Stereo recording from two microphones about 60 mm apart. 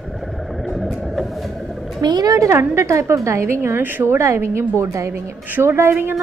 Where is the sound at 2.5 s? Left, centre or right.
Right.